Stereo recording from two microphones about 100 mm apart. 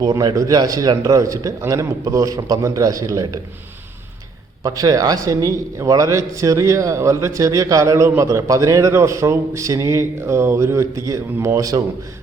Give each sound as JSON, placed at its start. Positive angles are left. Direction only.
{"t": 0.0, "sound": "a man's voice", "side_deg": -40}
{"t": 4.6, "sound": "a man's voice", "side_deg": -35}